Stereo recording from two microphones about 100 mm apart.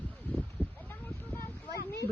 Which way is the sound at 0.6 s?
15° left (ahead or behind).